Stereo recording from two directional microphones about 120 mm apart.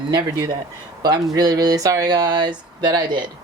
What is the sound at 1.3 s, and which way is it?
Speech, 30° right (ahead or behind).